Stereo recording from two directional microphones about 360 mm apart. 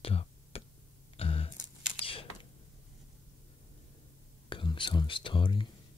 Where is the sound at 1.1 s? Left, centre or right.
Centre.